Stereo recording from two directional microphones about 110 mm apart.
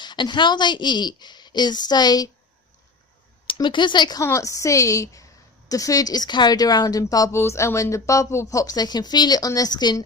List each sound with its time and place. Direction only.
0.0 s a woman's voice: 45° left (ahead or behind)
3.4 s speech: 50° left (ahead or behind)
4.2 s a woman's voice: 25° left (ahead or behind)